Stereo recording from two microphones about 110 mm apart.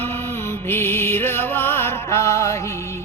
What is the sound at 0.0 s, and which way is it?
Music, 20° left (ahead or behind).